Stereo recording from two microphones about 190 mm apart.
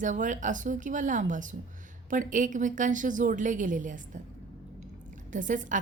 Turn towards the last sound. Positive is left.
turn(degrees=-40)  # may be behind; listen again after turning